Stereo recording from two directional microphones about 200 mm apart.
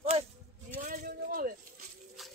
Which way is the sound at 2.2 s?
Centre (ahead or behind).